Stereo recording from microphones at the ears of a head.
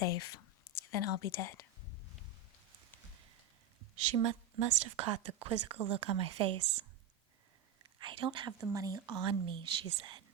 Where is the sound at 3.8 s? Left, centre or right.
Right.